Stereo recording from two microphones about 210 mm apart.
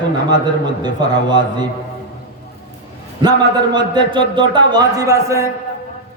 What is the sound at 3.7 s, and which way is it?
A man's voice, 20° right (ahead or behind).